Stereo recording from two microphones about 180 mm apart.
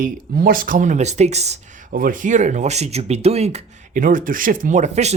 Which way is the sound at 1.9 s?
50° right (ahead or behind).